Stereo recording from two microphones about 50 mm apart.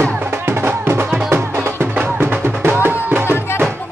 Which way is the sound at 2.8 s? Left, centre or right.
Right.